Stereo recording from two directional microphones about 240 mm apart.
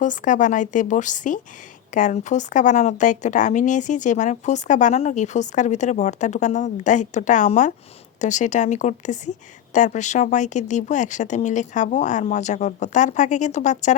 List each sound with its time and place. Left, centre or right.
0.0 s speech: left